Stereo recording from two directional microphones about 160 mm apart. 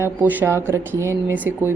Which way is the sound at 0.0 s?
10° right (ahead or behind).